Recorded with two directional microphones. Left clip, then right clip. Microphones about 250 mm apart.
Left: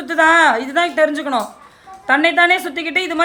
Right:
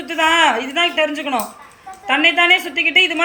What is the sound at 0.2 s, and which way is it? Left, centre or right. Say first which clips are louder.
A woman's voice: left 2 dB; centre.